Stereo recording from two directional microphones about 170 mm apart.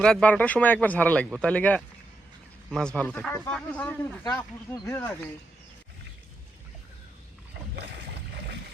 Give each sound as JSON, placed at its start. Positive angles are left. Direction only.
{"t": 0.0, "sound": "speech", "side_deg": 5}
{"t": 4.2, "sound": "speech", "side_deg": 20}
{"t": 7.9, "sound": "boat", "side_deg": -85}